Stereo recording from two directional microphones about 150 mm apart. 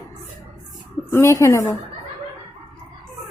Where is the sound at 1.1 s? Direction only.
20° left (ahead or behind).